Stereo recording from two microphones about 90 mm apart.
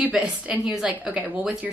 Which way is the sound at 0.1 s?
5° right (ahead or behind).